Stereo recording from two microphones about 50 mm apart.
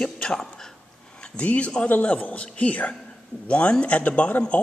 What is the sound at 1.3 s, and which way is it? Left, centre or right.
A man's voice, left.